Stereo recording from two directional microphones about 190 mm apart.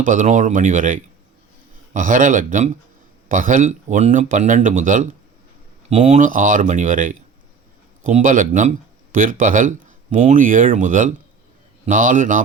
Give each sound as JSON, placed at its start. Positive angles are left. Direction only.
{"t": 0.0, "sound": "speech", "side_deg": -45}